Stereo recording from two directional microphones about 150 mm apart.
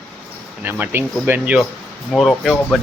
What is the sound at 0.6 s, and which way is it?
Speech, 15° right (ahead or behind).